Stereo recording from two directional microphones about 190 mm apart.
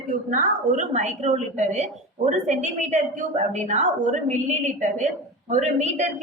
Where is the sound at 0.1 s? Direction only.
45° right (ahead or behind).